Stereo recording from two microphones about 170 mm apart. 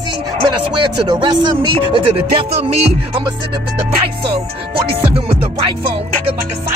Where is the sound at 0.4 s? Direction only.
25° right (ahead or behind).